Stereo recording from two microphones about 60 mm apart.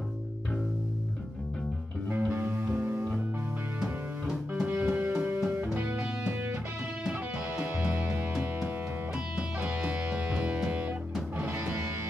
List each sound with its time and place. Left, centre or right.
2.5 s music: right
3.8 s music: centre
4.6 s music: right
9.6 s music: right